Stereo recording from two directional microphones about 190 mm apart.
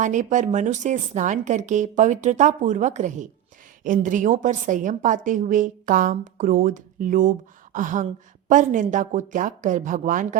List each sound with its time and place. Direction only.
0.0 s a woman's voice: 40° right (ahead or behind)